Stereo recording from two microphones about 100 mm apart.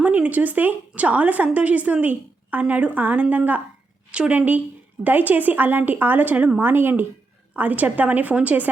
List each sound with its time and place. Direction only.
0.0 s a woman's voice: 15° right (ahead or behind)